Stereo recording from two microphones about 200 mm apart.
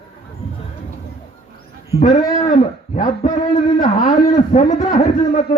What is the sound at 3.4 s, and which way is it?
A man's voice, 35° left (ahead or behind).